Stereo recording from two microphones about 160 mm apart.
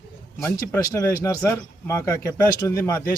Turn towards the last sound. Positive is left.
turn(degrees=15)  # may be behind; listen again after turning